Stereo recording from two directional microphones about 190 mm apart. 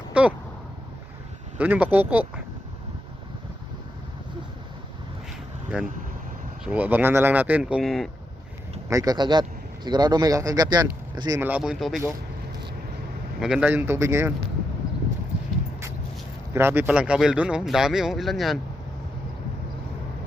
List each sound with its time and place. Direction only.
0.1 s a sound: 5° right (ahead or behind)
1.5 s speech: 10° right (ahead or behind)
6.7 s speech: 10° right (ahead or behind)
8.9 s a man's voice: 20° right (ahead or behind); by 12.0 s centre (ahead or behind)
13.4 s speech: 5° right (ahead or behind)
16.6 s speech: 10° right (ahead or behind)